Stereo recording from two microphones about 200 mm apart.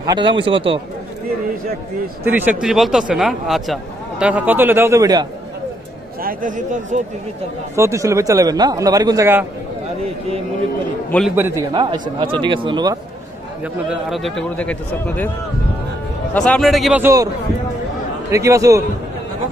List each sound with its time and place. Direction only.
0.1 s speech: 25° right (ahead or behind)
2.2 s speech: 10° right (ahead or behind)
6.2 s speech: 40° right (ahead or behind)
7.7 s a man's voice: 15° right (ahead or behind)
11.1 s speech: 5° left (ahead or behind)
11.3 s a man's voice: 10° right (ahead or behind)
11.7 s speech: 25° right (ahead or behind)
13.8 s speech: centre (ahead or behind)
16.3 s speech: 5° left (ahead or behind)
17.0 s a man's voice: 15° right (ahead or behind)
18.3 s a man's voice: 15° right (ahead or behind)